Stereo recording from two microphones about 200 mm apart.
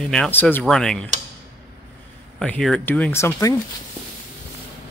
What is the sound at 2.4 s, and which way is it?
Speech, 5° left (ahead or behind).